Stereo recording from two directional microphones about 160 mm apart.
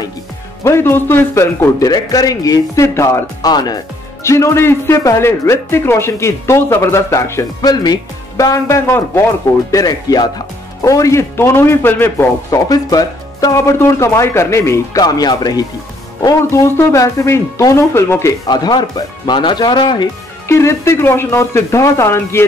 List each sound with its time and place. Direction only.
0.7 s a man's voice: 15° left (ahead or behind)
20.4 s a man's voice: 15° left (ahead or behind)